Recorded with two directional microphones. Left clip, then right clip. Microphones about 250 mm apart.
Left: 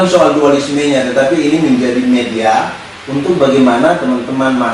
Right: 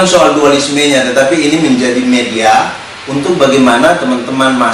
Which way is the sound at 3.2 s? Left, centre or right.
Centre.